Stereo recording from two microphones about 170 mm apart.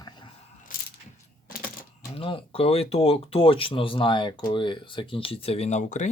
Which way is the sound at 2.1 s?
30° left (ahead or behind).